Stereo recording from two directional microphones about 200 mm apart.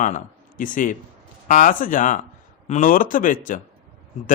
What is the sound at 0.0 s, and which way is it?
A man's voice, 40° left (ahead or behind).